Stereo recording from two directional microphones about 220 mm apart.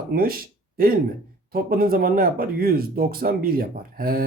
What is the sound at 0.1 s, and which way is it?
Speech, 40° right (ahead or behind).